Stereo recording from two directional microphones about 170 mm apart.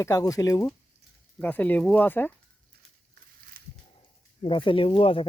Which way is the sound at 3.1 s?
55° right (ahead or behind).